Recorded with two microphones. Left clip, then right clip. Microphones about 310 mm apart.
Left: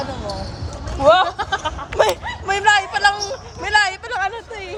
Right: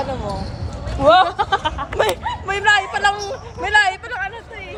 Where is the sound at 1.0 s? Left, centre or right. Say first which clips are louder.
Right 1 dB; centre.